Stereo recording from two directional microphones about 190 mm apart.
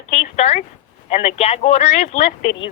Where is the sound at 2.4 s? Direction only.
75° left (ahead or behind).